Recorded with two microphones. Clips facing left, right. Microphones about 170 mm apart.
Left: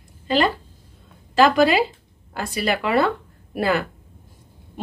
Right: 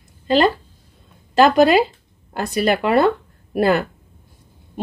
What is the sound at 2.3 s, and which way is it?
Speech, 50° right (ahead or behind).